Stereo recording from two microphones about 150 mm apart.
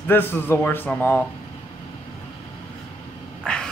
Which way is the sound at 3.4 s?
5° left (ahead or behind).